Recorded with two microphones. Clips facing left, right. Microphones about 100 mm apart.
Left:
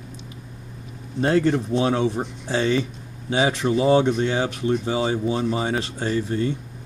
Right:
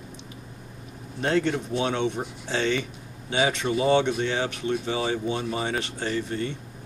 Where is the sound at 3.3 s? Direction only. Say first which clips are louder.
Left 4 dB; 30° left (ahead or behind).